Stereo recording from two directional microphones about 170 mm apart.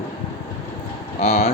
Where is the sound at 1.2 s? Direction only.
40° left (ahead or behind).